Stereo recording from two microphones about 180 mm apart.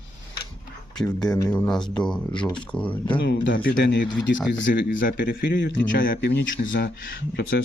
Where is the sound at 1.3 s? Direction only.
20° left (ahead or behind).